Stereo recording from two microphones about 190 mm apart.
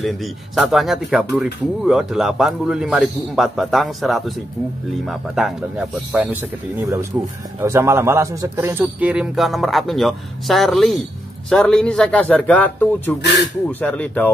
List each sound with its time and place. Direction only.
0.0 s speech: centre (ahead or behind)